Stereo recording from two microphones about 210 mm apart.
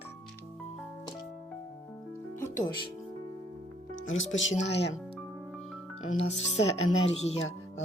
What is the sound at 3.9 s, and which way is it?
Speech, 65° left (ahead or behind).